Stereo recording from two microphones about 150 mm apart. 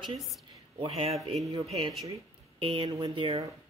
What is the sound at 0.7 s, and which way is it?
Speech, 40° right (ahead or behind).